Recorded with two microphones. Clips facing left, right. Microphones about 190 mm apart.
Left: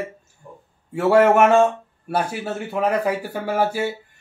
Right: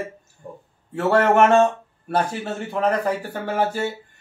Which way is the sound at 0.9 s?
10° left (ahead or behind).